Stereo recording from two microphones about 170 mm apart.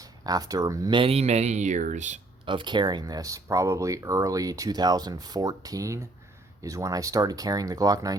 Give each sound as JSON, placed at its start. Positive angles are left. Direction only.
{"t": 0.0, "sound": "speech", "side_deg": -20}
{"t": 2.5, "sound": "speech", "side_deg": -25}